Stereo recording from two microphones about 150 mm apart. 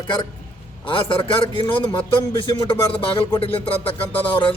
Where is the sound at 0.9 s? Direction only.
35° left (ahead or behind).